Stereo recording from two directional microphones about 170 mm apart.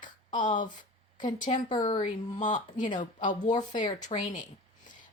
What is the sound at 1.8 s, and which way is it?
Speech, 50° left (ahead or behind).